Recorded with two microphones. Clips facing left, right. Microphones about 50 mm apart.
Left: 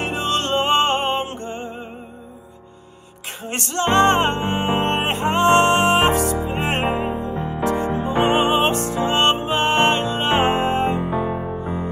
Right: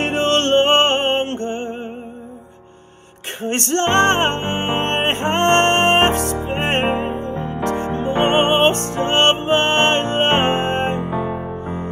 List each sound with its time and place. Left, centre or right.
0.0 s music: right
3.4 s music: right
8.1 s music: centre
8.4 s music: right
11.0 s music: centre